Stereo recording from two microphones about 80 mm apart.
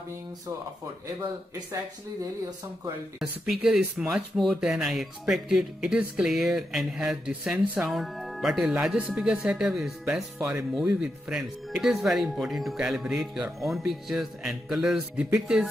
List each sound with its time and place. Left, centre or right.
3.2 s speech: centre
7.5 s speech: right
7.9 s speech: centre
8.9 s speech: centre